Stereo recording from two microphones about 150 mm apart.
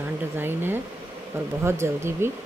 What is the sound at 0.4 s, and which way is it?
Speech, 15° right (ahead or behind).